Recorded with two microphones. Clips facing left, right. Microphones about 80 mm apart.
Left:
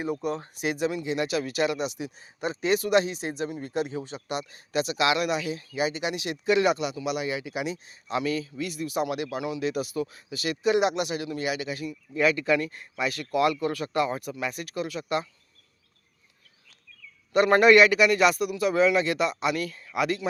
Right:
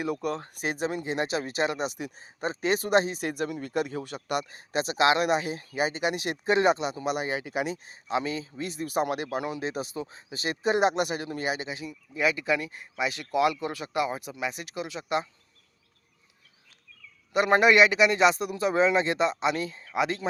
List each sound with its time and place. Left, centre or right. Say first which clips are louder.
0.0 s speech: even; right
2.1 s speech: left 1 dB; right
3.2 s speech: right 1 dB; right
4.4 s speech: left 2 dB; right
8.0 s speech: left 1 dB; right
11.7 s speech: left 4 dB; centre
17.3 s speech: left 3 dB; centre